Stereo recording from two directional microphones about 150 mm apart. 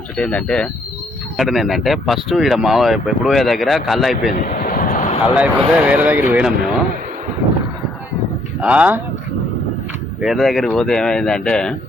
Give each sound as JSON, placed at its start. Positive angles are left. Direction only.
{"t": 0.2, "sound": "speech", "side_deg": 5}
{"t": 4.3, "sound": "a sound", "side_deg": 65}
{"t": 5.4, "sound": "speech", "side_deg": -10}
{"t": 8.6, "sound": "speech", "side_deg": -10}
{"t": 10.2, "sound": "speech", "side_deg": 0}